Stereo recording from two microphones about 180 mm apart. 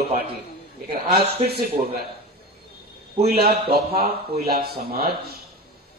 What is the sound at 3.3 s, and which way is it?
Speech, 60° right (ahead or behind).